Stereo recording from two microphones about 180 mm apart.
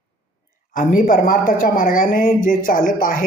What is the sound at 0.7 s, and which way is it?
Speech, 50° left (ahead or behind).